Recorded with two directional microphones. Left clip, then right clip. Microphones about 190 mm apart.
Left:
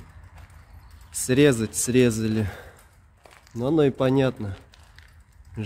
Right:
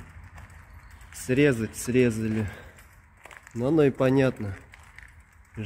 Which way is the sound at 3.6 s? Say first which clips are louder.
Left 1 dB; 5° left (ahead or behind).